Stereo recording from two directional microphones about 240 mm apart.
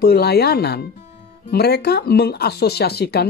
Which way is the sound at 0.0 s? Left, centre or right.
Left.